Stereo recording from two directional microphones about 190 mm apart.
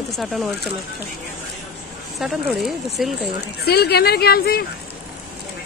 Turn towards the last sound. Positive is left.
turn(degrees=55)  # may be behind; listen again after turning